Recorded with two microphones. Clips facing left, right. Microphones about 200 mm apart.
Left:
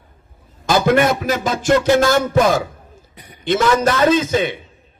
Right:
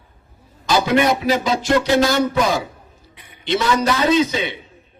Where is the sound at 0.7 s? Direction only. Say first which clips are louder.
Left 2 dB; 50° left (ahead or behind).